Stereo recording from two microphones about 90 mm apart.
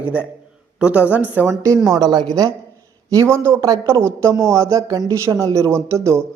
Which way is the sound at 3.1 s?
35° right (ahead or behind).